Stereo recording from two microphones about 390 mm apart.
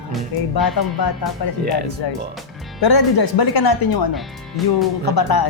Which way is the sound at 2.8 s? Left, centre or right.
Left.